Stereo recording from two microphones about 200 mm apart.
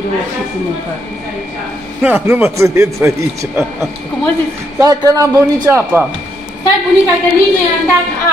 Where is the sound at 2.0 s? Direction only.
10° right (ahead or behind).